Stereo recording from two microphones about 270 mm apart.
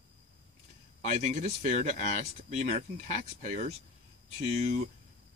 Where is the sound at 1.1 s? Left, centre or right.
Right.